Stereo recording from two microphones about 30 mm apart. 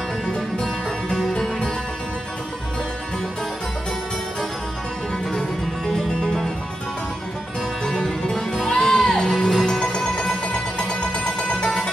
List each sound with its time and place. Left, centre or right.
0.3 s music: left
7.8 s music: centre
9.9 s music: left